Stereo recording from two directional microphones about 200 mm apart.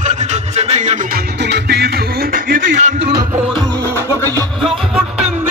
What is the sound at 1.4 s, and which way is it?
Music, 55° right (ahead or behind).